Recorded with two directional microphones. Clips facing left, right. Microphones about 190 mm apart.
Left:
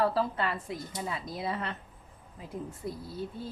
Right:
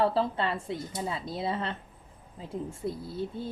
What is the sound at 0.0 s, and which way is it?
A woman's voice, 25° right (ahead or behind).